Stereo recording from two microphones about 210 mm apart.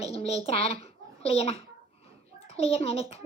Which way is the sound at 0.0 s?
30° left (ahead or behind).